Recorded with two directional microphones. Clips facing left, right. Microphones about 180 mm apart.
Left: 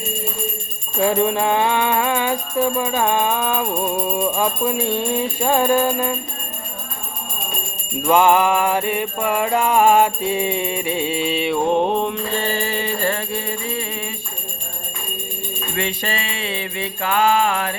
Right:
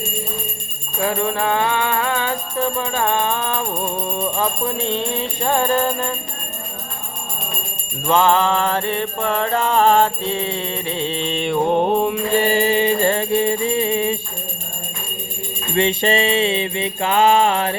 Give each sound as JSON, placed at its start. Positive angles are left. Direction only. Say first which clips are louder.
{"t": 1.0, "sound": "music", "louder": "left 2 dB", "side_deg": 20}
{"t": 8.0, "sound": "music", "louder": "left 1 dB", "side_deg": 15}
{"t": 15.7, "sound": "music", "louder": "right 8 dB", "side_deg": -25}